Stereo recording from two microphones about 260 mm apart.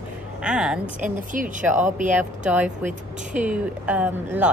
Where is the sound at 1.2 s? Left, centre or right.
Right.